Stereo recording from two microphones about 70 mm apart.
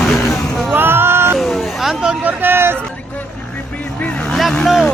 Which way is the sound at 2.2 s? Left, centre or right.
Right.